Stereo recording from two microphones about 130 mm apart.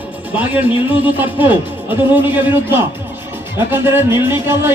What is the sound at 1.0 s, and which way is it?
A man's voice, 15° right (ahead or behind).